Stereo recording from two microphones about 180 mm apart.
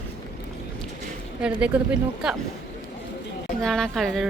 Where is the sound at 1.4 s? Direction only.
5° right (ahead or behind).